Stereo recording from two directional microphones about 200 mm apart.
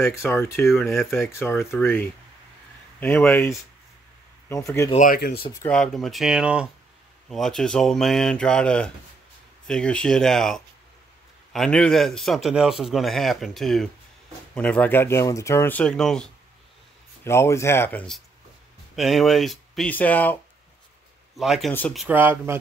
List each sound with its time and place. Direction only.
0.0 s speech: 10° left (ahead or behind)
0.7 s a man's voice: centre (ahead or behind)
1.1 s speech: 10° left (ahead or behind)
4.9 s speech: 45° left (ahead or behind)
5.7 s a man's voice: 5° left (ahead or behind)
17.2 s a man's voice: 15° left (ahead or behind)
21.4 s a man's voice: centre (ahead or behind)
22.0 s speech: 10° right (ahead or behind)